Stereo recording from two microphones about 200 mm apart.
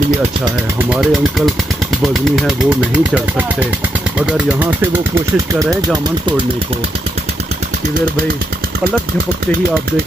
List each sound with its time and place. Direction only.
0.8 s speech: 5° right (ahead or behind)